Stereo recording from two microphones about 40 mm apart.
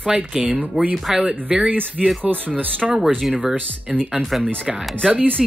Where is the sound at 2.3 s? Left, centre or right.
Right.